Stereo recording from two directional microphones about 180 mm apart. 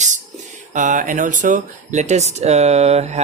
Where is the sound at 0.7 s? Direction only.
45° right (ahead or behind).